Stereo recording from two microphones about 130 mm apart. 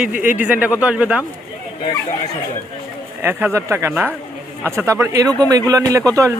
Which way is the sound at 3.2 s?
20° right (ahead or behind).